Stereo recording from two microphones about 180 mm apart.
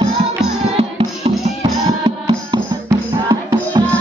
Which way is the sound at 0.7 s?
35° right (ahead or behind).